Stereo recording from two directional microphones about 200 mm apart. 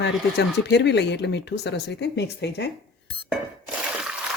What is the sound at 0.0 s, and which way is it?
Speech, 60° left (ahead or behind).